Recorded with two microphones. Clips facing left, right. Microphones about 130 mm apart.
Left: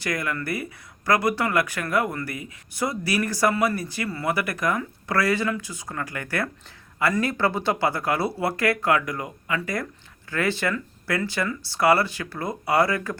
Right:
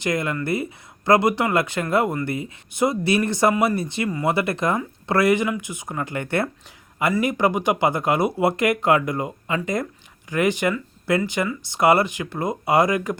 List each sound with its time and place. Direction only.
0.0 s speech: 25° right (ahead or behind)